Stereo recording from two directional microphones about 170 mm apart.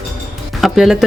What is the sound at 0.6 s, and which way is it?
Speech, centre (ahead or behind).